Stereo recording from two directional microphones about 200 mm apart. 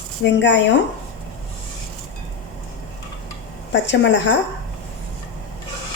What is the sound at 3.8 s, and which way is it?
Speech, 60° left (ahead or behind).